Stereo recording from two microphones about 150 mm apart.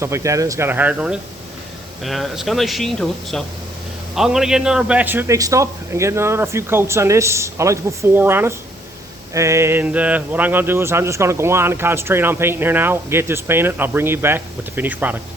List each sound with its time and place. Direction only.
0.0 s speech: 20° right (ahead or behind)